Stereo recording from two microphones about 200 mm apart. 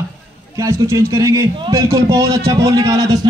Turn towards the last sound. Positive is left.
turn(degrees=-20)  # may be behind; listen again after turning